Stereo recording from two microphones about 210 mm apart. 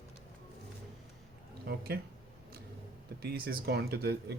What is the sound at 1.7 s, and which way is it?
Speech, 45° right (ahead or behind).